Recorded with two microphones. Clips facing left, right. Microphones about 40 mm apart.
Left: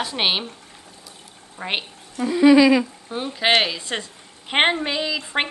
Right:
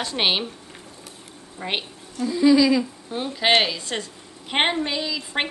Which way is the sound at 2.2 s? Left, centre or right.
Left.